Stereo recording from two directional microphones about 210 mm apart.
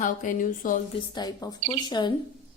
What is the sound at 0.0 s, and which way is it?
Speech, 35° left (ahead or behind).